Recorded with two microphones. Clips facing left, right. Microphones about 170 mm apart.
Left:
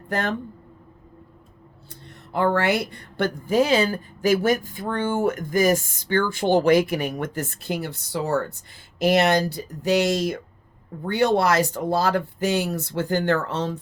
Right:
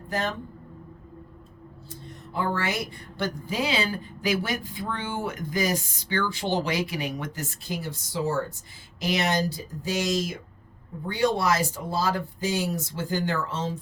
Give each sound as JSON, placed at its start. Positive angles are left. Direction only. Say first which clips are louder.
{"t": 0.1, "sound": "speech", "louder": "left 3 dB", "side_deg": 60}
{"t": 1.9, "sound": "speech", "louder": "left 5 dB", "side_deg": 65}